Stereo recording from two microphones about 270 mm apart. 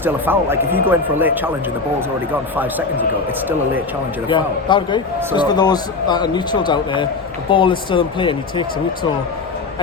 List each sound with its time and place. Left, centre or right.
0.0 s speech: centre
4.3 s a man's voice: centre